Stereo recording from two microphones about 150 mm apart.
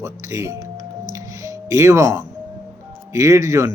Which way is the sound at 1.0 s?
20° right (ahead or behind).